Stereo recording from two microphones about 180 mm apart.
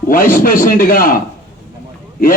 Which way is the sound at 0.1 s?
50° left (ahead or behind).